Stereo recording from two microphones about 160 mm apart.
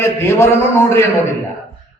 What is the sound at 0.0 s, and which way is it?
A man's voice, 15° left (ahead or behind).